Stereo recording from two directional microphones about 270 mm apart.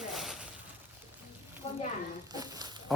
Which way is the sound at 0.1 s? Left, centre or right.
Centre.